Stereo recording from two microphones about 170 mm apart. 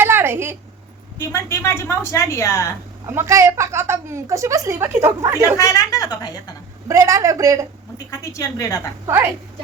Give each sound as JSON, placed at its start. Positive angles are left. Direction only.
{"t": 0.0, "sound": "a sound", "side_deg": -15}
{"t": 1.3, "sound": "a woman's voice", "side_deg": 15}
{"t": 3.1, "sound": "a woman's voice", "side_deg": -15}
{"t": 5.5, "sound": "a woman's voice", "side_deg": 20}
{"t": 6.8, "sound": "a woman's voice", "side_deg": -15}
{"t": 7.9, "sound": "a woman's voice", "side_deg": 20}